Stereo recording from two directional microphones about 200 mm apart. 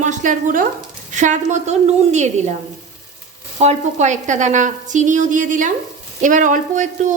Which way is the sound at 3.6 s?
35° right (ahead or behind).